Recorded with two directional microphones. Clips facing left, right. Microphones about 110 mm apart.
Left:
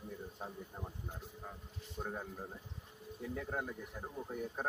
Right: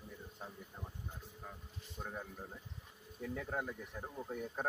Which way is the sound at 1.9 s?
20° left (ahead or behind).